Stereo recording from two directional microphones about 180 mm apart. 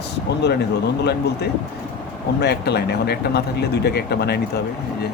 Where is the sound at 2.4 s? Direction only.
65° left (ahead or behind).